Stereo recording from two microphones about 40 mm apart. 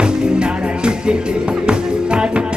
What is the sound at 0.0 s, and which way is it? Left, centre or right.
Music, right.